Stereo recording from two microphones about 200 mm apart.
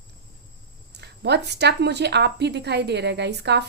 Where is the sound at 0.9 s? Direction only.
55° right (ahead or behind).